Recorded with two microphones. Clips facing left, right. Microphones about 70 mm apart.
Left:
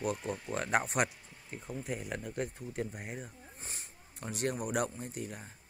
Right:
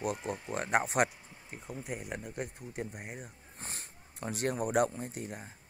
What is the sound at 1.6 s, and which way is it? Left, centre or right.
Speech, centre.